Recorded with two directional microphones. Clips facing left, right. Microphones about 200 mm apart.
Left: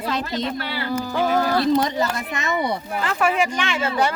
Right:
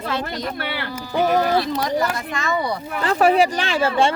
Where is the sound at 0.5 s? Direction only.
65° right (ahead or behind).